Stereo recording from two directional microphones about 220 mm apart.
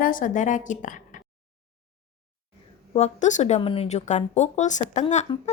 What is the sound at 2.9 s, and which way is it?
A woman's voice, 30° left (ahead or behind).